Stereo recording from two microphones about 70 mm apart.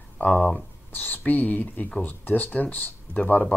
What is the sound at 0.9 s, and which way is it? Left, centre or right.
Speech, left.